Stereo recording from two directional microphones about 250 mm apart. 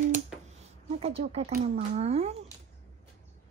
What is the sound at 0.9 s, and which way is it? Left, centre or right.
Speech, right.